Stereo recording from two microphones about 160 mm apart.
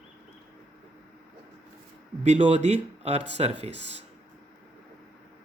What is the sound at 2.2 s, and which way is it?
Speech, 40° right (ahead or behind).